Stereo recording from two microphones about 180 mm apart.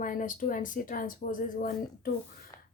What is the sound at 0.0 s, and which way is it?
Speech, 45° left (ahead or behind).